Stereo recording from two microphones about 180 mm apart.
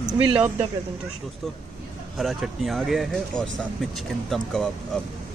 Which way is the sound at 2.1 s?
Centre (ahead or behind).